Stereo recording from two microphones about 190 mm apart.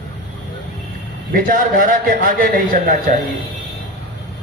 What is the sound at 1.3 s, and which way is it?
A man's voice, 45° right (ahead or behind).